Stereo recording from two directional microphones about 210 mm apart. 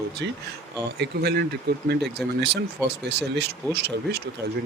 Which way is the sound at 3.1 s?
55° right (ahead or behind).